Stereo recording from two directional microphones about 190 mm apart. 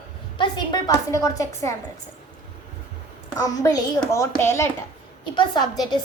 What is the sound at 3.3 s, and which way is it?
A woman's voice, 20° left (ahead or behind).